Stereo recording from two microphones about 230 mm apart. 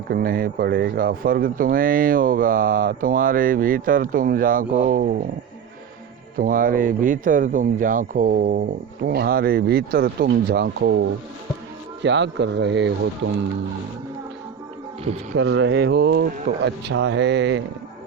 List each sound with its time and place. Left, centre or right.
0.1 s speech: right
6.3 s speech: right
12.0 s speech: right
15.4 s speech: right